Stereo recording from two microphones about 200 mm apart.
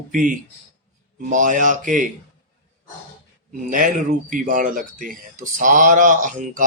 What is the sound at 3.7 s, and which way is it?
Speech, 40° right (ahead or behind).